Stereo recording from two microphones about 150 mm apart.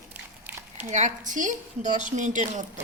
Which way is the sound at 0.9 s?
55° right (ahead or behind).